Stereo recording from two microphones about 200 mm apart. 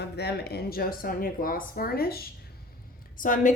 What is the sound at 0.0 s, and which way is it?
A woman's voice, 55° left (ahead or behind).